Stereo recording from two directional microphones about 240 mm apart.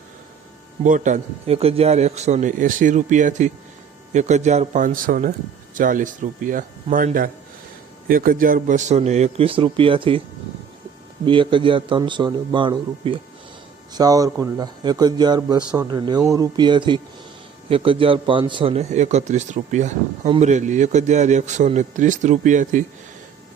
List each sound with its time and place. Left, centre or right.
0.9 s a man's voice: right
11.3 s a man's voice: right